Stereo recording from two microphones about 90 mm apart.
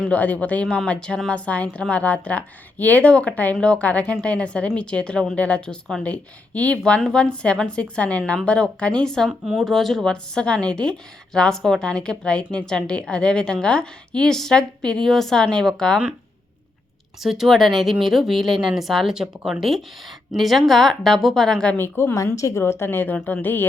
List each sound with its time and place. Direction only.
0.1 s a woman's voice: 15° left (ahead or behind)
17.2 s a woman's voice: centre (ahead or behind)
21.7 s a woman's voice: 25° left (ahead or behind)